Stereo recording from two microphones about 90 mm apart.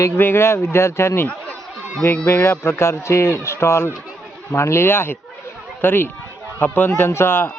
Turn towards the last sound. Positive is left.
turn(degrees=25)  # may be behind; listen again after turning